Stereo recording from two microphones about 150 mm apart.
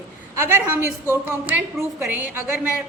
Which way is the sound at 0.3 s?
15° right (ahead or behind).